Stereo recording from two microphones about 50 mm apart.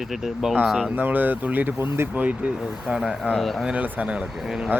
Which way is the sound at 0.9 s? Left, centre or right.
Right.